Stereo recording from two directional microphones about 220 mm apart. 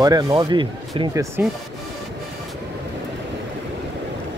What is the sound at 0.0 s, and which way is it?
Speech, 15° right (ahead or behind).